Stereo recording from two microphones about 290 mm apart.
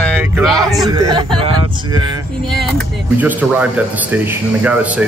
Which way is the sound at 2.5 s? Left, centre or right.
Centre.